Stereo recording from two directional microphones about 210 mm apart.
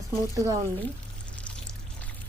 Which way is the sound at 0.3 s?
15° right (ahead or behind).